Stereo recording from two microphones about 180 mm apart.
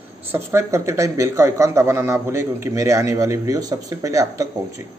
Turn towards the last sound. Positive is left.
turn(degrees=-20)  # may be behind; listen again after turning